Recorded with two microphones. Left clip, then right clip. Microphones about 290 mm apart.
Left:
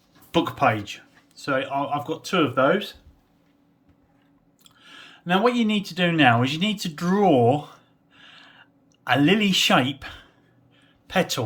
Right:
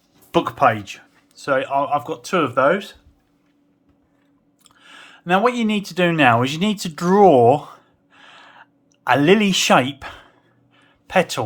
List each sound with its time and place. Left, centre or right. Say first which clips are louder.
0.3 s speech: right 4 dB; centre
4.6 s speech: right 2 dB; centre
10.8 s a sound: right 6 dB; centre